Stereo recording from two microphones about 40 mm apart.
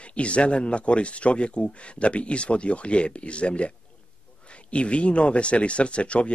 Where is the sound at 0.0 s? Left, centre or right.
Left.